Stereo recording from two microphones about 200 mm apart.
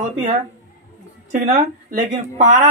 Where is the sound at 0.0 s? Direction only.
35° right (ahead or behind).